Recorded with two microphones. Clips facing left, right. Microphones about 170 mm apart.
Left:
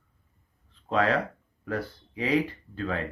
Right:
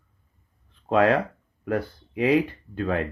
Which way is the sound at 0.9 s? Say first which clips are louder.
Right 5 dB; 55° right (ahead or behind).